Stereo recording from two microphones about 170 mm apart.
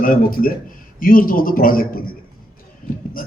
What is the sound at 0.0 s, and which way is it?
Speech, 55° left (ahead or behind).